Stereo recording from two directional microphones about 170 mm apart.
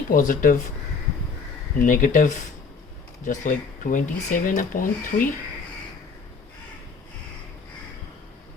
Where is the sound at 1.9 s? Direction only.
50° left (ahead or behind).